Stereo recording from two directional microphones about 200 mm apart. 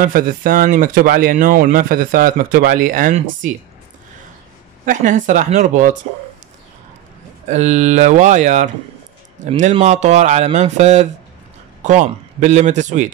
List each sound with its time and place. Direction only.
0.0 s speech: 45° right (ahead or behind)
4.8 s speech: 40° right (ahead or behind)
7.4 s speech: 35° right (ahead or behind)